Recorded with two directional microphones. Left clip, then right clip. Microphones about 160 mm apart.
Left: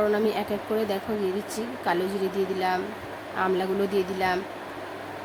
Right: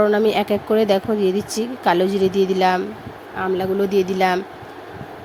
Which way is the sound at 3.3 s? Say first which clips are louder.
Right 5 dB; 25° right (ahead or behind).